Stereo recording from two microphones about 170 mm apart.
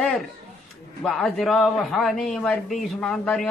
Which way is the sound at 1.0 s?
5° left (ahead or behind).